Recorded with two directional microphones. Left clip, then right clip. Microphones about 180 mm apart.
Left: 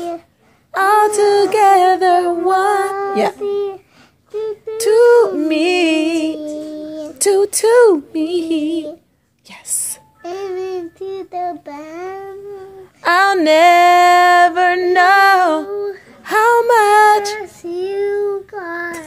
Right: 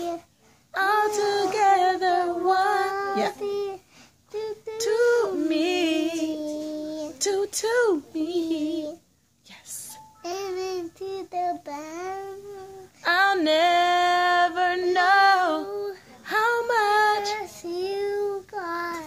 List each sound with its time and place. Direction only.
0.7 s female singing: 35° left (ahead or behind)
2.9 s child singing: 5° right (ahead or behind)
3.3 s a sound: 10° right (ahead or behind)
4.7 s a sound: 30° left (ahead or behind)
6.3 s a sound: 10° right (ahead or behind)
7.2 s speech: 35° left (ahead or behind)
8.5 s child singing: 10° right (ahead or behind)
10.2 s child singing: 10° right (ahead or behind)
13.0 s female singing: 35° left (ahead or behind)
15.6 s child singing: 5° right (ahead or behind)
16.3 s female singing: 35° left (ahead or behind)
17.4 s child singing: 10° right (ahead or behind)